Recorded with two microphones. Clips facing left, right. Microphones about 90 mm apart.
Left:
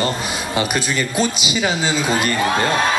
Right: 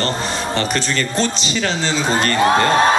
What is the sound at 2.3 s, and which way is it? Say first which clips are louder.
Speech: right 4 dB; 40° right (ahead or behind).